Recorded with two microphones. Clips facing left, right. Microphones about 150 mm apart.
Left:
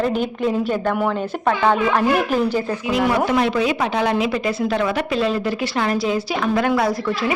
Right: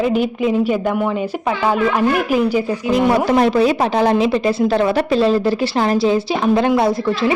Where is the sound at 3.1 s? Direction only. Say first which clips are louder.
Right 4 dB; 40° right (ahead or behind).